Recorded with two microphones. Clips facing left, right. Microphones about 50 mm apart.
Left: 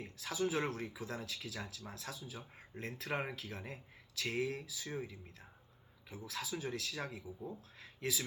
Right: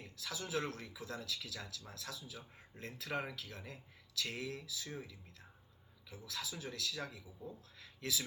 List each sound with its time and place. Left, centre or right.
0.0 s speech: left